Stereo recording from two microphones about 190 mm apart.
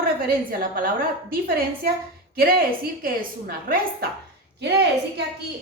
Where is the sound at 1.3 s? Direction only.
50° right (ahead or behind).